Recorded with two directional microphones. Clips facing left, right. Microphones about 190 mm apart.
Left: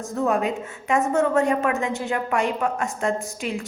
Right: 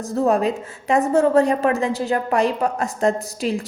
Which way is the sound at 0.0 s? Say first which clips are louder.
Right 4 dB; 35° right (ahead or behind).